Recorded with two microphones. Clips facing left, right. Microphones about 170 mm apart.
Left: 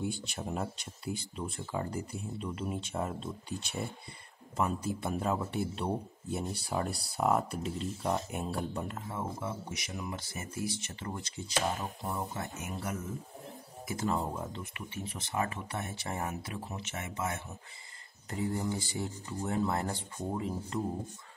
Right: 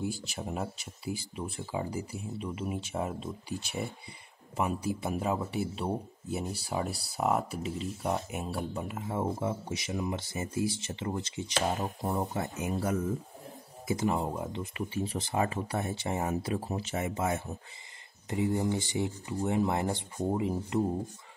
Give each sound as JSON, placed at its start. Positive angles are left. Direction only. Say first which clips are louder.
{"t": 0.0, "sound": "speech", "louder": "right 1 dB", "side_deg": -5}
{"t": 9.0, "sound": "speech", "louder": "right 6 dB", "side_deg": -30}
{"t": 13.8, "sound": "speech", "louder": "right 3 dB", "side_deg": -15}
{"t": 14.6, "sound": "speech", "louder": "right 8 dB", "side_deg": -30}
{"t": 18.3, "sound": "speech", "louder": "right 4 dB", "side_deg": -20}